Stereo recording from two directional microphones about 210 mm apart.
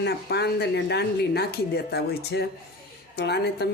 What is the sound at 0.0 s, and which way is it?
A woman's voice, 50° left (ahead or behind).